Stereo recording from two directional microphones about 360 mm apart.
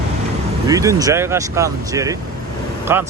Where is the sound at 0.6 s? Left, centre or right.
Centre.